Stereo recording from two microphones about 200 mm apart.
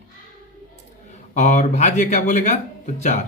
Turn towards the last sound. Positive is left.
turn(degrees=35)  # may be behind; listen again after turning